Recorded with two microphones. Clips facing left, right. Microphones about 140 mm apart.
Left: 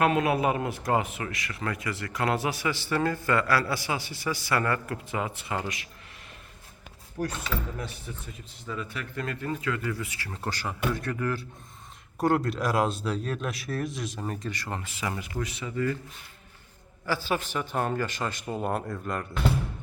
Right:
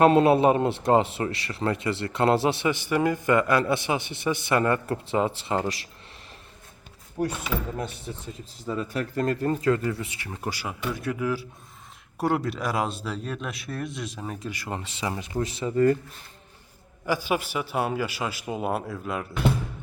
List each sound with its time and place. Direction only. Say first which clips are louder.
0.0 s speech: right 6 dB; 30° right (ahead or behind)
7.2 s speech: right 3 dB; 25° right (ahead or behind); by 14.8 s 10° right (ahead or behind)
14.8 s speech: right 2 dB; 25° right (ahead or behind)
17.1 s a man's voice: right 3 dB; 15° right (ahead or behind)